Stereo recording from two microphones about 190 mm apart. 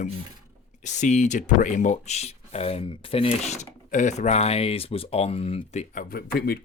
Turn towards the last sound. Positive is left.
turn(degrees=55)  # may be behind; listen again after turning